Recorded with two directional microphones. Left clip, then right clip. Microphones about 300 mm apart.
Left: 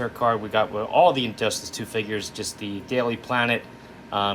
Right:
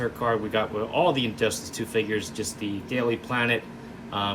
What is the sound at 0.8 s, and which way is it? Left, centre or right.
Speech, centre.